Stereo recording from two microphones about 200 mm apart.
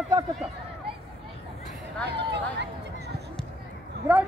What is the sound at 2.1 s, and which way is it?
Speech, 60° right (ahead or behind).